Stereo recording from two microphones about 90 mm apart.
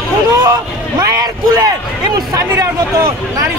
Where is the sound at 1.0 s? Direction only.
40° right (ahead or behind).